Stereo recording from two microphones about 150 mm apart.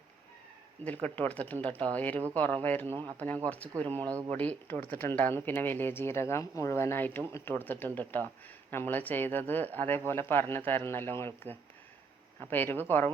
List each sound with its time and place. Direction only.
1.0 s speech: 10° left (ahead or behind)
2.9 s speech: 20° right (ahead or behind)
3.2 s speech: 10° left (ahead or behind)
4.0 s speech: 20° right (ahead or behind)
4.3 s speech: 10° left (ahead or behind)
12.4 s speech: 10° left (ahead or behind)